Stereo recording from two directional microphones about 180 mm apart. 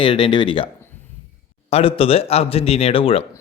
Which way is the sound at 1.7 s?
30° left (ahead or behind).